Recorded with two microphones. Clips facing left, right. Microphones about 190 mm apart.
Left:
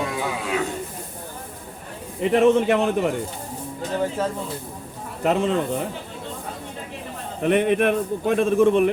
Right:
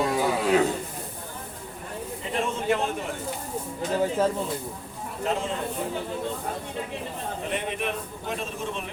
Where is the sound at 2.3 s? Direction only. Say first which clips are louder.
Left 10 dB; 65° left (ahead or behind).